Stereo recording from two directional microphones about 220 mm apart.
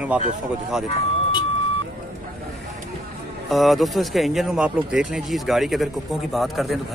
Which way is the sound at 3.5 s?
Centre (ahead or behind).